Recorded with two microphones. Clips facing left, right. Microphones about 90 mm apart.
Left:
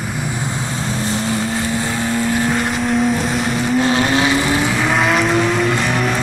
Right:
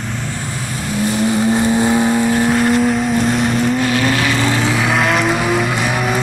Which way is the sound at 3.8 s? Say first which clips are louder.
Left 1 dB; 30° left (ahead or behind).